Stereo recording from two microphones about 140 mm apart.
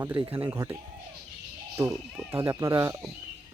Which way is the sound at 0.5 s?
20° right (ahead or behind).